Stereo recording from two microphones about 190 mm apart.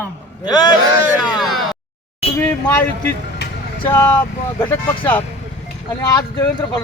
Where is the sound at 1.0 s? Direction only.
5° right (ahead or behind).